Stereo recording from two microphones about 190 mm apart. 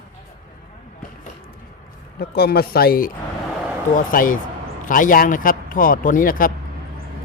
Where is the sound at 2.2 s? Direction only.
55° left (ahead or behind).